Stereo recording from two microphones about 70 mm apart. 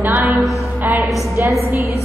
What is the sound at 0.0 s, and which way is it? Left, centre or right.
Music, right.